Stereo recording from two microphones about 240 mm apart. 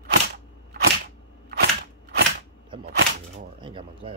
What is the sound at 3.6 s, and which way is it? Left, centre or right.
Speech, right.